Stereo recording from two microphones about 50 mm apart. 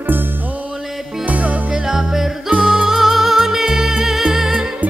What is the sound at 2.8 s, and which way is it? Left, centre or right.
Music, centre.